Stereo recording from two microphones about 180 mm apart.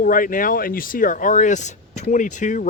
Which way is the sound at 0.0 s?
50° left (ahead or behind).